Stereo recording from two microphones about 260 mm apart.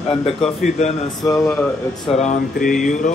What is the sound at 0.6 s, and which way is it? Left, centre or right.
Speech, left.